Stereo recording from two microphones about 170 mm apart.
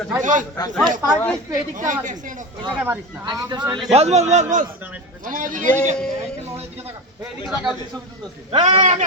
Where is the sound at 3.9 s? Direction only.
40° right (ahead or behind).